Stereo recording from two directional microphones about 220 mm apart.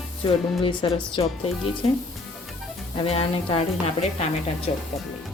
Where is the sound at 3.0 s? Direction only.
25° left (ahead or behind).